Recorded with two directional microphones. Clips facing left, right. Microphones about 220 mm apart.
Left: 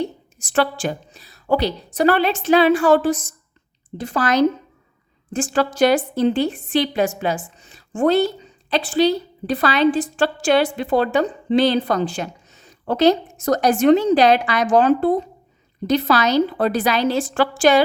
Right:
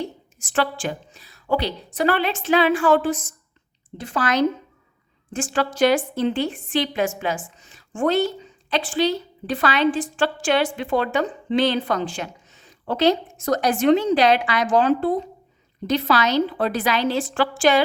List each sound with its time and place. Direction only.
0.0 s a woman's voice: 40° left (ahead or behind)